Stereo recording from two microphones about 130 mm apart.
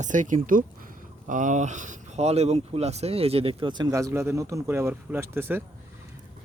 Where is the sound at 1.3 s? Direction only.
75° right (ahead or behind).